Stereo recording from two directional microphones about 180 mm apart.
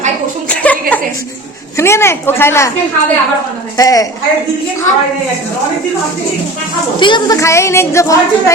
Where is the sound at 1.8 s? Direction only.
15° left (ahead or behind).